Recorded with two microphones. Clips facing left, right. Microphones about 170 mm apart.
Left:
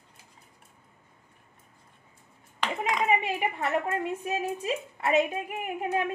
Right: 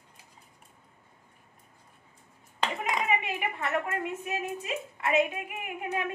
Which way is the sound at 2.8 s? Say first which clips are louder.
Left 5 dB; 35° left (ahead or behind).